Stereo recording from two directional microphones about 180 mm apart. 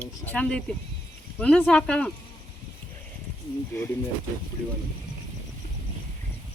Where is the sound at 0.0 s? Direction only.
10° left (ahead or behind).